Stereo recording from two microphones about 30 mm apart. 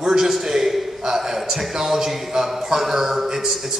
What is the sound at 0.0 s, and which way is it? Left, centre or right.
A man's voice, centre.